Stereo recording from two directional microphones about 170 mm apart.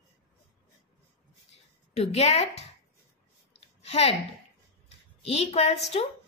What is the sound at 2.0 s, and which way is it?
Speech, 40° left (ahead or behind).